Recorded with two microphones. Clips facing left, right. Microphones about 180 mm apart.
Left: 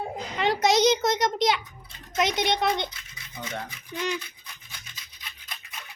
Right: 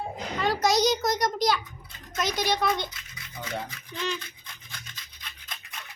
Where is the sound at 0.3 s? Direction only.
20° left (ahead or behind).